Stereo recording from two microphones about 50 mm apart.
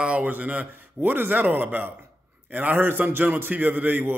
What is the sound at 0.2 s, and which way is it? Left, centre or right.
A man's voice, right.